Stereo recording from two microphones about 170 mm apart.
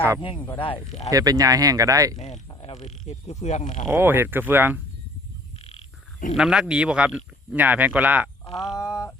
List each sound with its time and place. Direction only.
0.6 s speech: 35° left (ahead or behind)
1.1 s speech: 20° right (ahead or behind)
2.1 s speech: 40° left (ahead or behind)
3.9 s speech: 15° right (ahead or behind)
6.3 s speech: 5° right (ahead or behind)
8.6 s speech: 20° left (ahead or behind)